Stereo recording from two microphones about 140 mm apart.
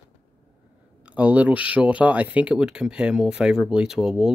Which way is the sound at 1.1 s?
10° right (ahead or behind).